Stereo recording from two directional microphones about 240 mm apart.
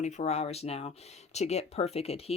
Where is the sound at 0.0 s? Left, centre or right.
Left.